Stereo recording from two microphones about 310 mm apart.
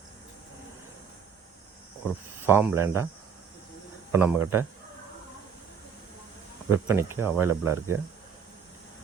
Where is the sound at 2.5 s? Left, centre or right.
Centre.